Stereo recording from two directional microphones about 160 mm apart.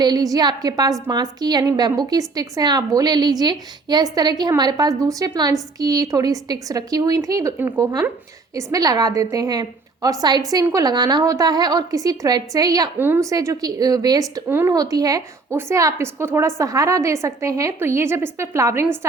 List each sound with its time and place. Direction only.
0.0 s a woman's voice: 25° right (ahead or behind)